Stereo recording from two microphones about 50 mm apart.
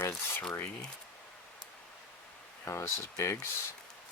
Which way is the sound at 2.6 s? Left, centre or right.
Left.